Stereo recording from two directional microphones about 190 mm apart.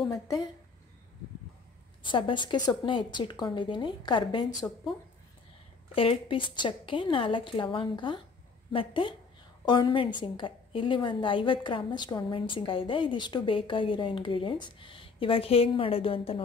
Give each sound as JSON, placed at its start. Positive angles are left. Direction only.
{"t": 0.1, "sound": "a woman's voice", "side_deg": 20}
{"t": 2.0, "sound": "a woman's voice", "side_deg": 25}
{"t": 5.9, "sound": "a woman's voice", "side_deg": 25}